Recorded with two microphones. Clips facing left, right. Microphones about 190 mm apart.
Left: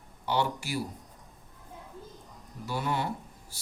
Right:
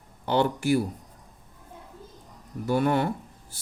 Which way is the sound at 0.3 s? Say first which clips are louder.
Right 7 dB; 55° right (ahead or behind).